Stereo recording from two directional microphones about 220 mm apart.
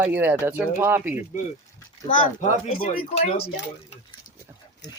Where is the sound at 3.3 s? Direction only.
45° left (ahead or behind).